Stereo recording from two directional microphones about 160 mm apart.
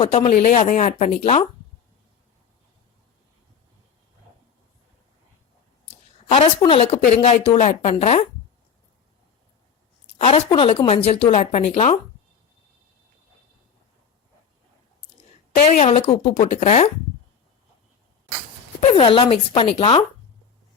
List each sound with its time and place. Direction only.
0.0 s a woman's voice: 35° left (ahead or behind)
0.3 s speech: 50° left (ahead or behind)
6.3 s a woman's voice: 35° left (ahead or behind)
10.2 s a woman's voice: 40° left (ahead or behind)
15.8 s a woman's voice: 40° left (ahead or behind)
18.8 s a woman's voice: 35° left (ahead or behind)